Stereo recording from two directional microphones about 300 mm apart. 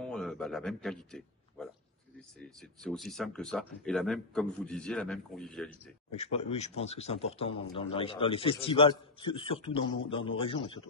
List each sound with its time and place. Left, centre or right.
0.0 s a sound: centre
2.8 s a man's voice: centre
6.1 s speech: left